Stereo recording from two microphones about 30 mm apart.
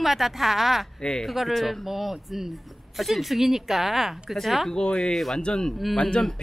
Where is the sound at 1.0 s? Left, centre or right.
Left.